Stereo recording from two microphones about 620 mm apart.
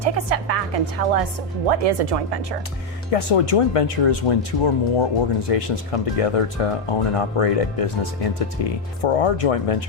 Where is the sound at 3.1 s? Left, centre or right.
Left.